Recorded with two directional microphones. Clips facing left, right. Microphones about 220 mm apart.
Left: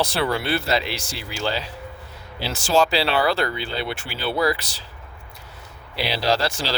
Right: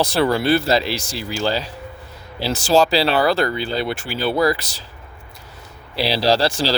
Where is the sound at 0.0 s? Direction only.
40° right (ahead or behind).